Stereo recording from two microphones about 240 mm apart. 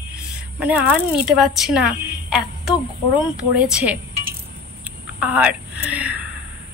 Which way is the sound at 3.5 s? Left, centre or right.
Centre.